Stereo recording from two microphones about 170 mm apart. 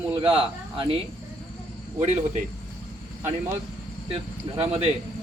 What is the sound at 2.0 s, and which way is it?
Speech, 45° right (ahead or behind).